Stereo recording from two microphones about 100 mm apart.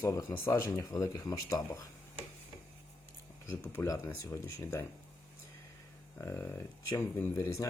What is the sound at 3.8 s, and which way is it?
Speech, 20° left (ahead or behind).